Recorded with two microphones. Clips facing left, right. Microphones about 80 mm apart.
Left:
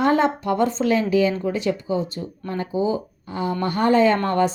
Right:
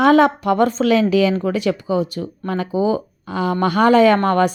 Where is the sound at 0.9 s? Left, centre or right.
Right.